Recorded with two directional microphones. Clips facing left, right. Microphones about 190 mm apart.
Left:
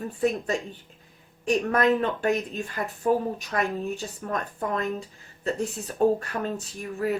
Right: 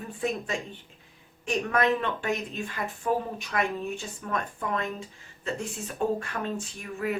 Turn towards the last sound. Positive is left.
turn(degrees=40)  # may be behind; listen again after turning